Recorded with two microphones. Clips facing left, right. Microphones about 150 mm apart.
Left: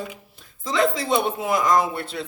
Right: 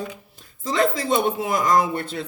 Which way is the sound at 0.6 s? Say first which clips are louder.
Even; 40° right (ahead or behind).